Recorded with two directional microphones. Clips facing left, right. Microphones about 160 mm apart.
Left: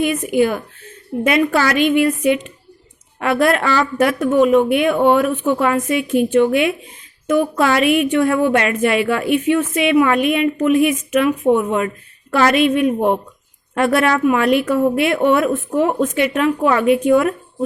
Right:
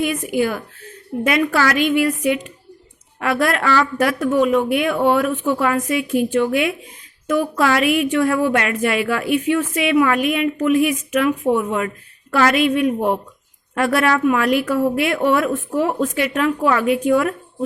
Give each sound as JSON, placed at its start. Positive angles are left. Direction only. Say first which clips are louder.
{"t": 0.0, "sound": "a woman's voice", "louder": "left 3 dB", "side_deg": 20}